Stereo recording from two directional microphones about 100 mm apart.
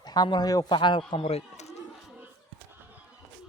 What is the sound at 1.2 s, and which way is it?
Speech, 90° left.